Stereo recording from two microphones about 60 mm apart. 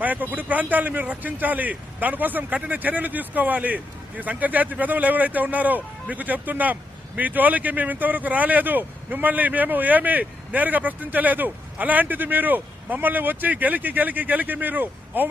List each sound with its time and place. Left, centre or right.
0.0 s speech: right